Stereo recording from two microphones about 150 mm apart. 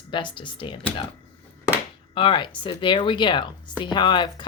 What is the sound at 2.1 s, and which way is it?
Speech, 35° left (ahead or behind).